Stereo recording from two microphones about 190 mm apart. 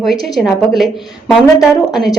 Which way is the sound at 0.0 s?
Centre (ahead or behind).